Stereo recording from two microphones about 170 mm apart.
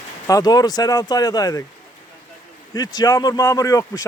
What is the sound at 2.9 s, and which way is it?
Speech, 25° left (ahead or behind).